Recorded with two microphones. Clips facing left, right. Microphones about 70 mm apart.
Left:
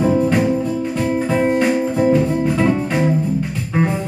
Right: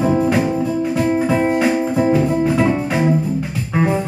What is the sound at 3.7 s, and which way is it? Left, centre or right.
Music, centre.